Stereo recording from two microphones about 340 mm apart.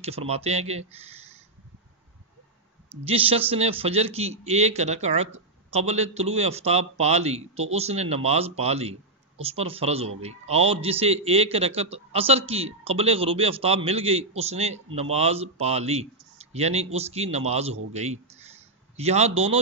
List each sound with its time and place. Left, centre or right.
0.0 s a man's voice: centre
3.0 s a man's voice: centre